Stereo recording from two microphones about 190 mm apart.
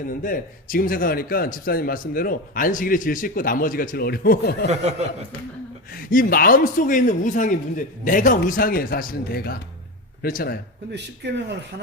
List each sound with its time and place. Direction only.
0.0 s a man's voice: 45° left (ahead or behind)
5.9 s a man's voice: 45° left (ahead or behind)
10.9 s speech: 60° right (ahead or behind)